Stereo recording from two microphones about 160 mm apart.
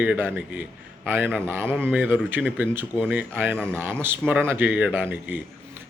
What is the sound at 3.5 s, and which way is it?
Speech, 10° left (ahead or behind).